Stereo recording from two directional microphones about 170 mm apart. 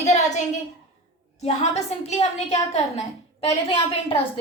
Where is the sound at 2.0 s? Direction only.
40° left (ahead or behind).